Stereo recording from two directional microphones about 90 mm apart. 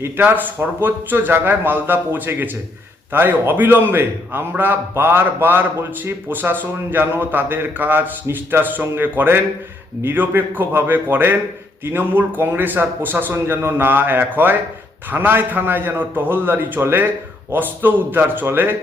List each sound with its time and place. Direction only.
0.0 s a man's voice: 20° right (ahead or behind)